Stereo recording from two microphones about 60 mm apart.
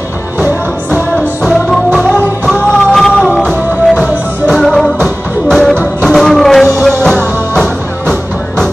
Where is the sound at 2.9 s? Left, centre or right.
Centre.